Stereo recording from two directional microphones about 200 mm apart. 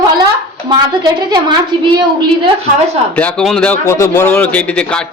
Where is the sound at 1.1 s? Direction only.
20° right (ahead or behind).